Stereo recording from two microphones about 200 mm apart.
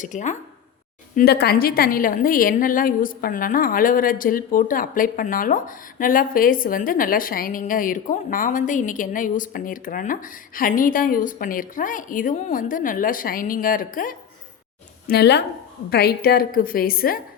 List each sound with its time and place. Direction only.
0.0 s speech: 40° left (ahead or behind)
1.1 s a woman's voice: 55° left (ahead or behind)
15.0 s a woman's voice: 55° left (ahead or behind)